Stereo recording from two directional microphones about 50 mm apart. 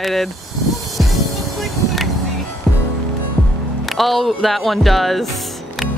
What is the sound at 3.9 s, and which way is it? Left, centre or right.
Speech, centre.